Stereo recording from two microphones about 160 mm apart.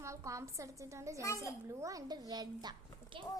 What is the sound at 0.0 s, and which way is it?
A woman's voice, 20° right (ahead or behind).